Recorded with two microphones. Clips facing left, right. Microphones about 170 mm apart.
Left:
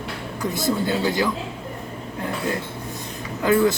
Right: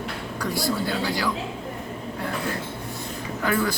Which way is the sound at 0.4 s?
20° left (ahead or behind).